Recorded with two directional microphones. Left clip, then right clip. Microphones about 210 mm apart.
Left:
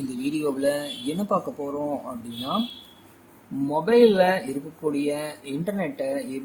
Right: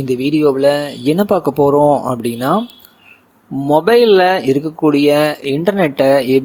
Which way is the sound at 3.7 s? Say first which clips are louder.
Right 9 dB; 45° right (ahead or behind).